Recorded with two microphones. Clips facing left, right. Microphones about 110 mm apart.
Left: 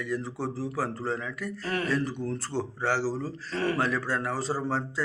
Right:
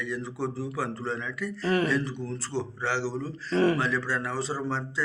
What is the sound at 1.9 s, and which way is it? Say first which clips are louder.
A man's voice: even; 45° left (ahead or behind).